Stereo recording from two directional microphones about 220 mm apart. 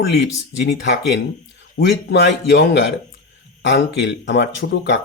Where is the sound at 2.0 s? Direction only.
50° left (ahead or behind).